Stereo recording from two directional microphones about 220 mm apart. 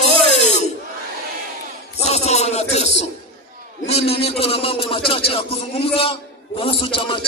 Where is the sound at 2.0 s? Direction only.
30° left (ahead or behind).